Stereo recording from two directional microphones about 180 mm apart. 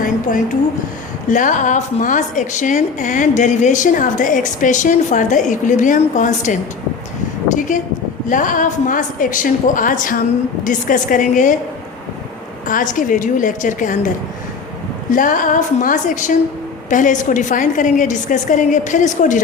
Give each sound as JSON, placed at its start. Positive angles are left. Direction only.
{"t": 0.0, "sound": "a woman's voice", "side_deg": 45}
{"t": 7.7, "sound": "a woman's voice", "side_deg": 45}
{"t": 12.6, "sound": "a woman's voice", "side_deg": 45}
{"t": 15.1, "sound": "a woman's voice", "side_deg": 45}